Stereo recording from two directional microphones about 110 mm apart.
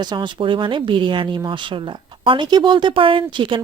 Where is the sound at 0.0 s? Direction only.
45° right (ahead or behind).